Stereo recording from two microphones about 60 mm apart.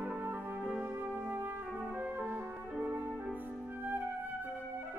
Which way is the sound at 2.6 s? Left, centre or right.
Centre.